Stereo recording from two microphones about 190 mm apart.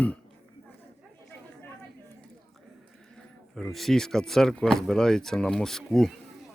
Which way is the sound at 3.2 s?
Centre (ahead or behind).